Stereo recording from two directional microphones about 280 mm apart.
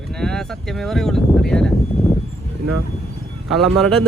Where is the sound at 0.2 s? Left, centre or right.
Centre.